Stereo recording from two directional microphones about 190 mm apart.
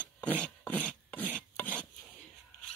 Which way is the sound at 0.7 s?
10° left (ahead or behind).